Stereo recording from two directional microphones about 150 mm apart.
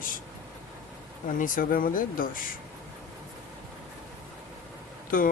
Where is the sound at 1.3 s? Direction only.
65° left (ahead or behind).